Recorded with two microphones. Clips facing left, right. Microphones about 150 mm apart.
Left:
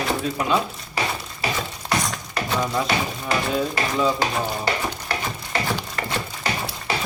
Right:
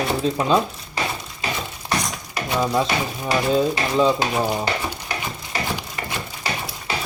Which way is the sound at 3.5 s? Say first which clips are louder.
Right 4 dB; 25° right (ahead or behind).